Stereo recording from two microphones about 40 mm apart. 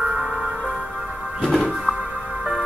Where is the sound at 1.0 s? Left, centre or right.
Centre.